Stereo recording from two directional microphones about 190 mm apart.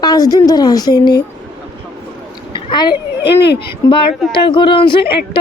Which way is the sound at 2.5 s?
25° left (ahead or behind).